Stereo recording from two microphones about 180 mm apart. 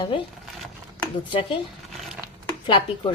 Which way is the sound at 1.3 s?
30° left (ahead or behind).